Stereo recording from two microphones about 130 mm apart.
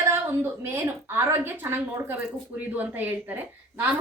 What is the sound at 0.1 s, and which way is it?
A woman's voice, 20° right (ahead or behind).